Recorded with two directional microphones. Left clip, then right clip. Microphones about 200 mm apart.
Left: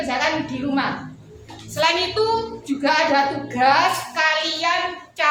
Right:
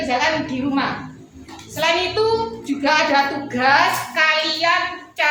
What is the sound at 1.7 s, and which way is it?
Child singing, 20° left (ahead or behind).